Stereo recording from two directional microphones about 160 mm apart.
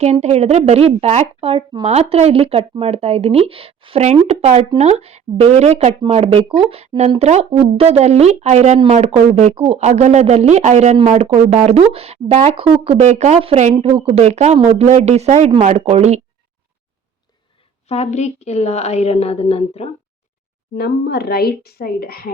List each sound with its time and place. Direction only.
0.0 s speech: 45° right (ahead or behind)
17.8 s a woman's voice: 40° left (ahead or behind)
20.7 s a woman's voice: 85° left